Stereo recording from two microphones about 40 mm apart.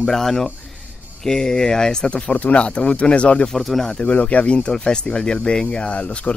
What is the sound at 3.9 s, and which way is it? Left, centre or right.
Speech, left.